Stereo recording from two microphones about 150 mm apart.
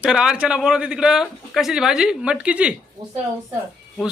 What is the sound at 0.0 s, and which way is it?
A man's voice, 5° right (ahead or behind).